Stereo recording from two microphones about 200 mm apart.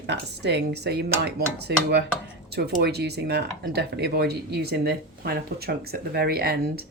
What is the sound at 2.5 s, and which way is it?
Speech, 55° right (ahead or behind).